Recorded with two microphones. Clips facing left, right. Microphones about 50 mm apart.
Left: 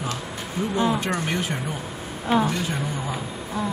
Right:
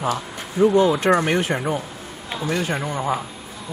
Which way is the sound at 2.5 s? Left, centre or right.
Right.